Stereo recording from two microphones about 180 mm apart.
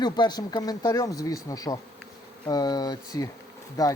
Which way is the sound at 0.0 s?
25° left (ahead or behind).